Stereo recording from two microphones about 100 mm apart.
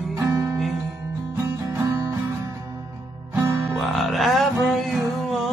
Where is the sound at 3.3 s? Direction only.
25° right (ahead or behind).